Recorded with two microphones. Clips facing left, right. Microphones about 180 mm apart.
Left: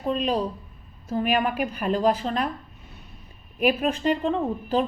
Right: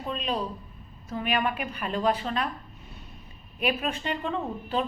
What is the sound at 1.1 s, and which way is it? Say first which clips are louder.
A woman's voice: left 4 dB; 40° left (ahead or behind).